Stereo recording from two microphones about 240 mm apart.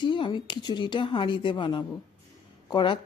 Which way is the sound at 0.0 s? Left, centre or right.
Centre.